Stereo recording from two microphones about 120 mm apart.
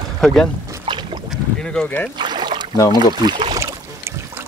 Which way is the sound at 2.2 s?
40° right (ahead or behind).